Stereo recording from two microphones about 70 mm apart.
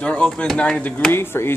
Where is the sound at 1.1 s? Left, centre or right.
Left.